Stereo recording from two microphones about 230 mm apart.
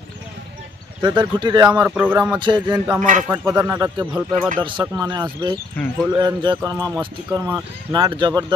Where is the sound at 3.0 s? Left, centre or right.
Right.